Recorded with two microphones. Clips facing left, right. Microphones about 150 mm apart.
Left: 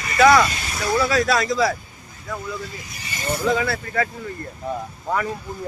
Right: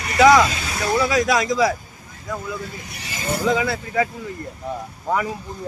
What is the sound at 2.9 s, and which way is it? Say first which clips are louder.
Speech: right 2 dB; 90° right.